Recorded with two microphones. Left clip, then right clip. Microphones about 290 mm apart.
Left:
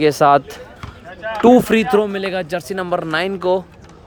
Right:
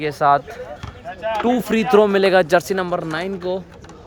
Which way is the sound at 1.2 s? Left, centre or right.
Right.